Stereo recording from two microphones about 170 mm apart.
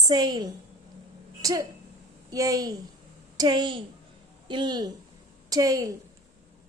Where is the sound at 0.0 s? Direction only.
25° right (ahead or behind).